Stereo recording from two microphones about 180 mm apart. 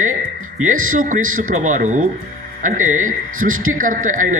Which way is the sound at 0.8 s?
50° right (ahead or behind).